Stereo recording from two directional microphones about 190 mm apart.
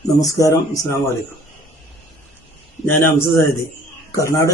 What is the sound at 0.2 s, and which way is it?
Speech, 15° left (ahead or behind).